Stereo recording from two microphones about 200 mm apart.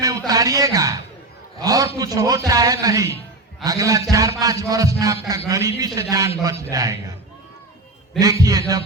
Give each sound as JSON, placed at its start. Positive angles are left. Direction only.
{"t": 0.0, "sound": "a sound", "side_deg": -20}
{"t": 1.6, "sound": "music", "side_deg": -20}
{"t": 8.2, "sound": "music", "side_deg": -15}